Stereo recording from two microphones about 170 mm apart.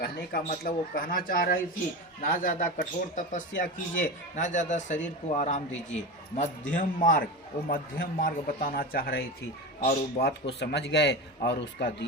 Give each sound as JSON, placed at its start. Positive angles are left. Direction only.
{"t": 0.0, "sound": "a man's voice", "side_deg": 65}
{"t": 10.2, "sound": "a man's voice", "side_deg": 75}